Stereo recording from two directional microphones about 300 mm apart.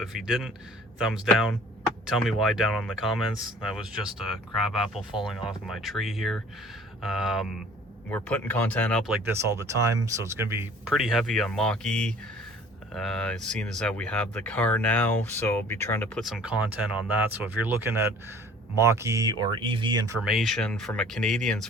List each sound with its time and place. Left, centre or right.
0.0 s speech: centre
20.2 s speech: centre